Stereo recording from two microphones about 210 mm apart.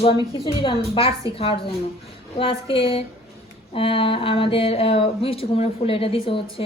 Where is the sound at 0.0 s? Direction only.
25° left (ahead or behind).